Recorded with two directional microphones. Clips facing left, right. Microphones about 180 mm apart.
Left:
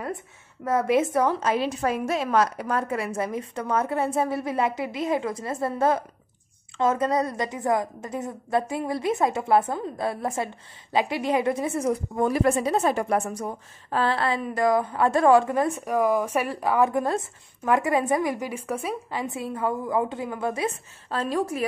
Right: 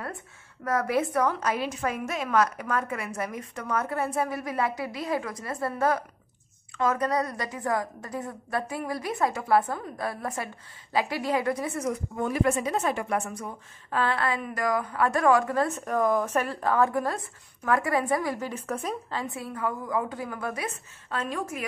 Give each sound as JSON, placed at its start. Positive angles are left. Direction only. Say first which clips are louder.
{"t": 0.7, "sound": "a woman's voice", "louder": "left 4 dB", "side_deg": 25}
{"t": 15.5, "sound": "a woman's voice", "louder": "left 2 dB", "side_deg": 15}